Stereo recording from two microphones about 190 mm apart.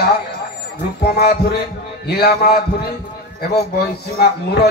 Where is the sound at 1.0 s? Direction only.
55° left (ahead or behind).